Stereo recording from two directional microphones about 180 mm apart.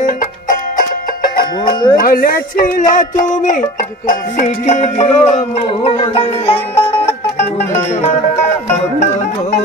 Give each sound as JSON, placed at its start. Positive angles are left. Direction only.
{"t": 0.0, "sound": "music", "side_deg": 50}
{"t": 1.7, "sound": "music", "side_deg": 25}
{"t": 2.0, "sound": "speech", "side_deg": 55}
{"t": 4.4, "sound": "music", "side_deg": 40}